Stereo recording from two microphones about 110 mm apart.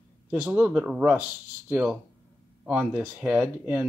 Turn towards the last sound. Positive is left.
turn(degrees=-15)  # may be behind; listen again after turning